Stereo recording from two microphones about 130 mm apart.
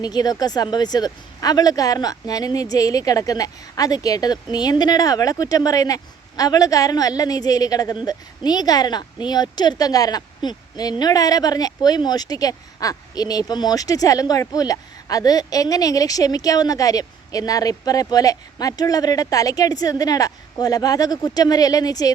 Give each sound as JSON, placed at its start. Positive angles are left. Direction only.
{"t": 0.0, "sound": "a woman's voice", "side_deg": 30}